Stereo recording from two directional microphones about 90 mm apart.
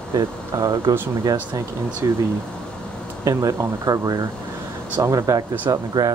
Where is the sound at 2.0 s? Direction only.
40° right (ahead or behind).